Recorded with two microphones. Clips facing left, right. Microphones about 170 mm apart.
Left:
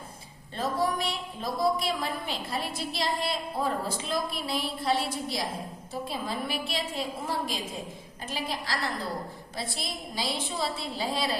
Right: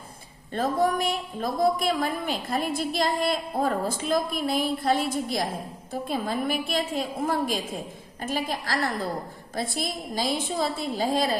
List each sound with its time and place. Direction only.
0.5 s a woman's voice: 50° right (ahead or behind)